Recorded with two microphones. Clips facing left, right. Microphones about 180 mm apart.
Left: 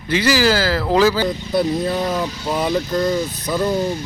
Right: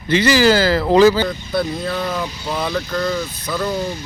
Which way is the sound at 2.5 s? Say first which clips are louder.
Left 3 dB; 20° left (ahead or behind).